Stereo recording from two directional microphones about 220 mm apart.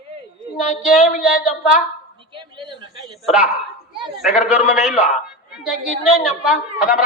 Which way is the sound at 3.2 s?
Centre (ahead or behind).